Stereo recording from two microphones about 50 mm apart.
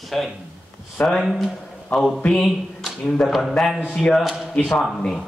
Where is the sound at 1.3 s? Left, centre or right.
Centre.